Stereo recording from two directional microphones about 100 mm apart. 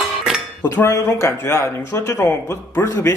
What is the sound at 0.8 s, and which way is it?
Speech, 30° left (ahead or behind).